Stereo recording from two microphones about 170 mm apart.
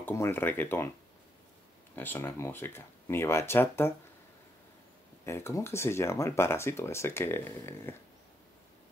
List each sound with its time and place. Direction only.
0.0 s speech: 15° left (ahead or behind)
2.0 s speech: 10° left (ahead or behind)
5.2 s speech: 15° left (ahead or behind)